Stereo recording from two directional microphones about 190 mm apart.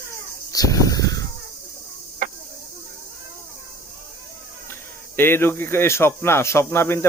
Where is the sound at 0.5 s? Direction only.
20° left (ahead or behind).